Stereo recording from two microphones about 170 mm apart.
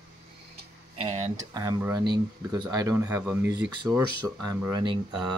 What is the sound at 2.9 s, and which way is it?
Speech, 10° right (ahead or behind).